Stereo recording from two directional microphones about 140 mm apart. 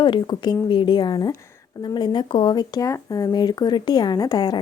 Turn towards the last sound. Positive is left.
turn(degrees=30)  # may be behind; listen again after turning